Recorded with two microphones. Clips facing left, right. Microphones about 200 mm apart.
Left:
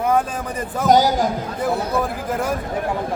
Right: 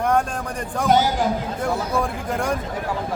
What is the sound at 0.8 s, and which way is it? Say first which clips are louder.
Speech: left 3 dB; 40° left (ahead or behind).